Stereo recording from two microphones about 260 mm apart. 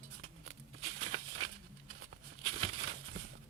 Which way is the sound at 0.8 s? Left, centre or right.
Right.